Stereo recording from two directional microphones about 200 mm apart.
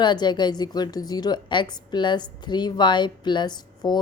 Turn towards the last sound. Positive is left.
turn(degrees=20)  # may be behind; listen again after turning